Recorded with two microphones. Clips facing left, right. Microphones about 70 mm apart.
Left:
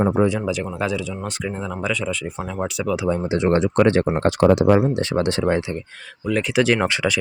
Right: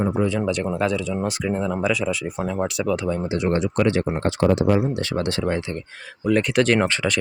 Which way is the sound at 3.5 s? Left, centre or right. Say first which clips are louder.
Left 4 dB; left.